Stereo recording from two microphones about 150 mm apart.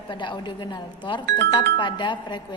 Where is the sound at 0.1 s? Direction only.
30° left (ahead or behind).